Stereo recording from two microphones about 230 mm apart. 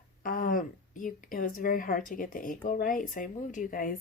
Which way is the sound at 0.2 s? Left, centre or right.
Left.